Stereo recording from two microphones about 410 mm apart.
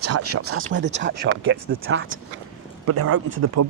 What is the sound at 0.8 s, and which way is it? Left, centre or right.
Speech, right.